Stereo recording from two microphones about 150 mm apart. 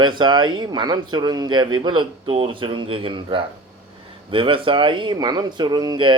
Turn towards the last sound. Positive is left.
turn(degrees=-30)  # may be behind; listen again after turning